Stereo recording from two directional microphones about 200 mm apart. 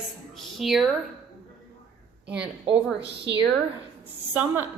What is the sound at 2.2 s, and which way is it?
Speech, 5° right (ahead or behind).